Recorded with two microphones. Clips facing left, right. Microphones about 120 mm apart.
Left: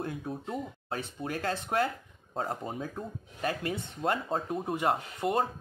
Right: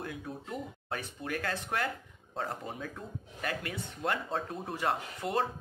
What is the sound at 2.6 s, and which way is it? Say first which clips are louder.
Speech: left 4 dB; 30° left (ahead or behind).